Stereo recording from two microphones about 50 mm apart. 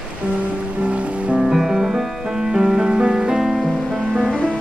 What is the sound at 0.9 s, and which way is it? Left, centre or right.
Music, right.